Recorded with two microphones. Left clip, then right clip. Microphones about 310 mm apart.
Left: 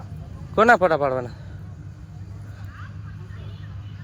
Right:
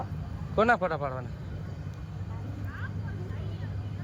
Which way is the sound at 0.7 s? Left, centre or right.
Left.